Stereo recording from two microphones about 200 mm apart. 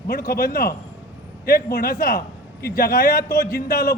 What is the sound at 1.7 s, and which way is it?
A man's voice, 50° left (ahead or behind).